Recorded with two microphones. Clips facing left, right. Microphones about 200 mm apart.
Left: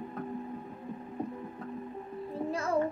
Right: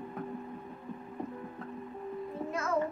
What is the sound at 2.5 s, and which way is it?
Music, 30° left (ahead or behind).